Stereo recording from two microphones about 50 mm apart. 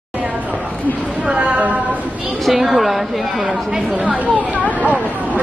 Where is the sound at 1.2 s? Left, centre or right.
Right.